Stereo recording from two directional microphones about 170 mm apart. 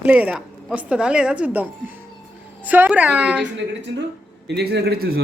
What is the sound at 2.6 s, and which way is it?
Speech, 10° right (ahead or behind).